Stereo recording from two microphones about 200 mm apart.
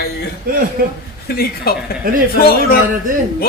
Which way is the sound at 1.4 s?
50° left (ahead or behind).